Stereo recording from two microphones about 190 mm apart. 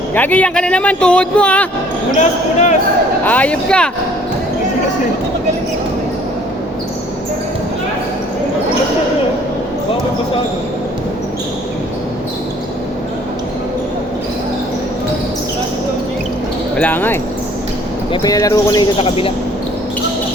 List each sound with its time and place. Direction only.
0.1 s speech: 10° left (ahead or behind)
2.1 s speech: 40° left (ahead or behind)
3.2 s speech: 5° left (ahead or behind)
16.7 s speech: 10° left (ahead or behind)
18.1 s speech: 20° left (ahead or behind)